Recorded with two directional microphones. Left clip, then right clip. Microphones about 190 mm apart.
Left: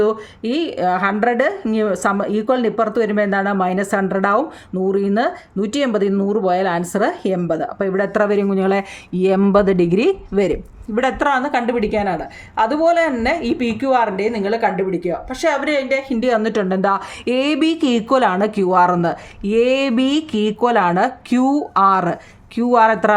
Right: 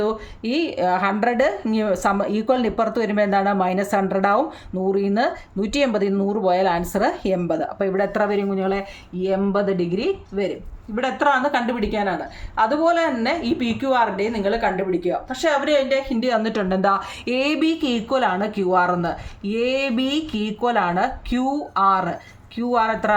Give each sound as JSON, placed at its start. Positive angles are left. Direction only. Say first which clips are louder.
{"t": 0.0, "sound": "speech", "louder": "left 6 dB", "side_deg": 20}
{"t": 10.9, "sound": "a woman's voice", "louder": "left 2 dB", "side_deg": 40}